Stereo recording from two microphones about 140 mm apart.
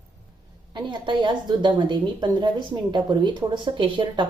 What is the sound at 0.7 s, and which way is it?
Speech, 35° right (ahead or behind).